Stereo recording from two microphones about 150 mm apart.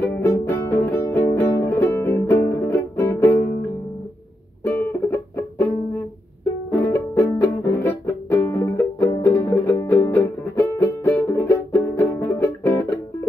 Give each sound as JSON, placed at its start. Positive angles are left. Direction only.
{"t": 0.2, "sound": "music", "side_deg": 20}
{"t": 4.6, "sound": "music", "side_deg": 15}